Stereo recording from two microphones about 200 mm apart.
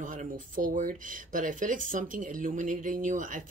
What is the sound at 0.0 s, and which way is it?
Speech, 40° right (ahead or behind).